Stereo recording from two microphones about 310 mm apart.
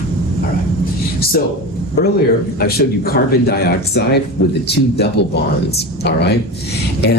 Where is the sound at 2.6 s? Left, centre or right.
Left.